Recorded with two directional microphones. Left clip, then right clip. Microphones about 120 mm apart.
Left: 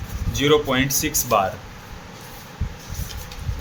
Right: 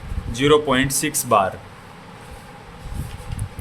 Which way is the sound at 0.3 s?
30° right (ahead or behind).